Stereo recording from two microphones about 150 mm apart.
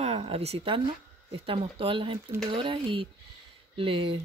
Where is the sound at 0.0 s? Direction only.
45° right (ahead or behind).